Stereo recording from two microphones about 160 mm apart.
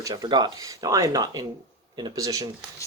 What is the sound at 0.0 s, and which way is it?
Speech, 25° right (ahead or behind).